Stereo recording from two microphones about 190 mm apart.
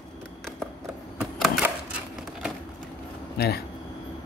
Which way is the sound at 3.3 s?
55° left (ahead or behind).